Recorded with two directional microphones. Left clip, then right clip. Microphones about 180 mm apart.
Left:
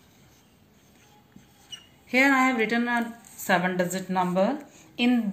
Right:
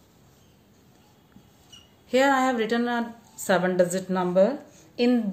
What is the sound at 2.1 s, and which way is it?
A woman's voice, 35° right (ahead or behind).